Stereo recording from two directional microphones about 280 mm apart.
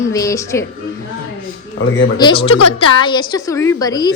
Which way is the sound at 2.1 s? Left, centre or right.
Centre.